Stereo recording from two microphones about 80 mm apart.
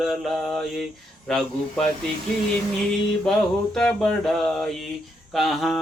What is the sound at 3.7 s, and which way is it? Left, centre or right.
Mantra, centre.